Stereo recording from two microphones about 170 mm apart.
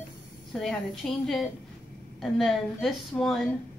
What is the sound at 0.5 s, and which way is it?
A woman's voice, centre (ahead or behind).